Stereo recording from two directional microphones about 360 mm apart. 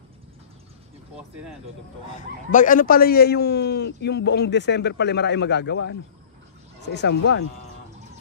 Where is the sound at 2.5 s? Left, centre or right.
Left.